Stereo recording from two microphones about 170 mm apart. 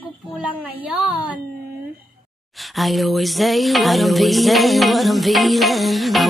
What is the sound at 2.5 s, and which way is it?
Music, centre (ahead or behind).